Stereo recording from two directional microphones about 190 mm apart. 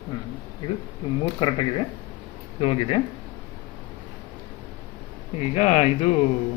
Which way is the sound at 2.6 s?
30° left (ahead or behind).